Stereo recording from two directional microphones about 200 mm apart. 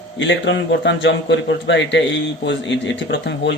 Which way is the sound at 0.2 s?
65° left (ahead or behind).